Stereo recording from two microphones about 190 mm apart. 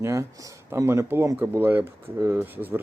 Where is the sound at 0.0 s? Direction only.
15° right (ahead or behind).